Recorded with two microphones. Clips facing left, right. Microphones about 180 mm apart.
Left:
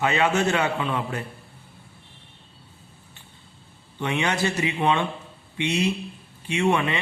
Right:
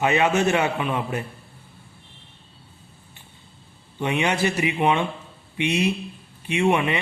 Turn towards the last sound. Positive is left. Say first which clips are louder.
# right 2 dB
turn(degrees=-20)  # may be behind; listen again after turning